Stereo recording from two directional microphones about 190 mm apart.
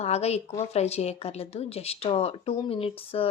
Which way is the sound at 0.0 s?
35° left (ahead or behind).